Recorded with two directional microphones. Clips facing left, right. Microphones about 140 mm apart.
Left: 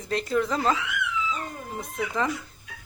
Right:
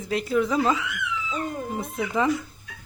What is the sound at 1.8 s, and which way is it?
Speech, centre (ahead or behind).